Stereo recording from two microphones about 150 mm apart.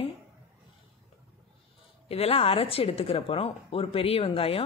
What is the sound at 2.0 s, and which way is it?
Speech, 40° left (ahead or behind).